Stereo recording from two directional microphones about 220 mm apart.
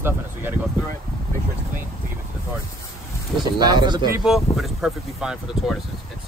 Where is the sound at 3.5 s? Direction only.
20° right (ahead or behind).